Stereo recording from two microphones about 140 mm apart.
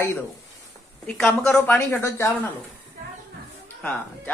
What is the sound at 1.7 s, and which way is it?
Speech, 15° left (ahead or behind).